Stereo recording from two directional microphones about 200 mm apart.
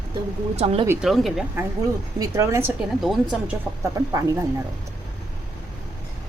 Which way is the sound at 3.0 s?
Centre (ahead or behind).